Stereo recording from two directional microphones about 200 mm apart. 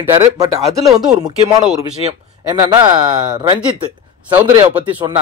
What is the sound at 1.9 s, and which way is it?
Speech, 30° right (ahead or behind).